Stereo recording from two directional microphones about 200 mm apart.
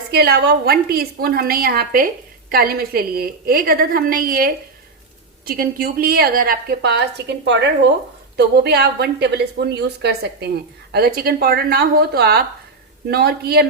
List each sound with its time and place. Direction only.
0.1 s a woman's voice: 55° right (ahead or behind)